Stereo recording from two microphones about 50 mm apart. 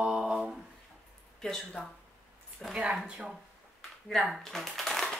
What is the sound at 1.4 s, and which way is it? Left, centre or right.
Speech, centre.